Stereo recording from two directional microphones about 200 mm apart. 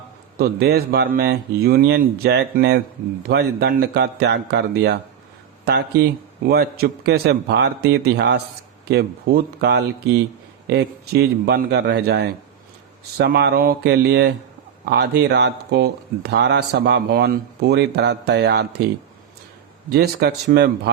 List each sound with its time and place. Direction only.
0.3 s speech: 50° right (ahead or behind)
19.9 s speech: 55° right (ahead or behind)